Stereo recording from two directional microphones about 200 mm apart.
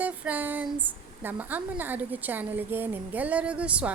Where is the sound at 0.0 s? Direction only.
10° right (ahead or behind).